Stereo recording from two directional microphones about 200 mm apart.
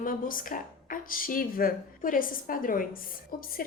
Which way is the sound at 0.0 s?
45° left (ahead or behind).